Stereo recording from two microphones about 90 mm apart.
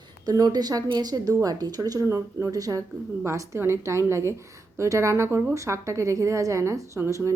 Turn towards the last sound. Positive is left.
turn(degrees=-30)  # may be behind; listen again after turning